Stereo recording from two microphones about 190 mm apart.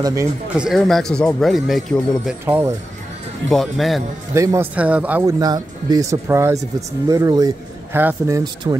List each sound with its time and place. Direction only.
0.0 s speech: 15° right (ahead or behind)
0.6 s speech: centre (ahead or behind)
2.4 s speech: 10° right (ahead or behind)
3.4 s speech: centre (ahead or behind)
4.3 s speech: 15° right (ahead or behind)
5.4 s speech: 20° right (ahead or behind)